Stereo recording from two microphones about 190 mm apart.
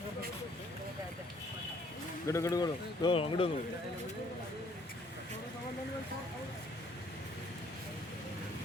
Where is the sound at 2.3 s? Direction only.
15° left (ahead or behind).